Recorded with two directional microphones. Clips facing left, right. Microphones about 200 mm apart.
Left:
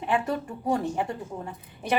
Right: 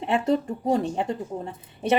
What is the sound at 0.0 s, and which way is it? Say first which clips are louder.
Speech: right 4 dB; 25° right (ahead or behind).